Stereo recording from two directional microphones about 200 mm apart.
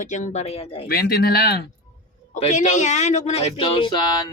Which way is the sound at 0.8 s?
50° left (ahead or behind).